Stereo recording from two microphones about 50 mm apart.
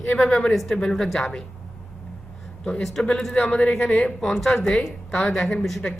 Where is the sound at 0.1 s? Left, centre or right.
Left.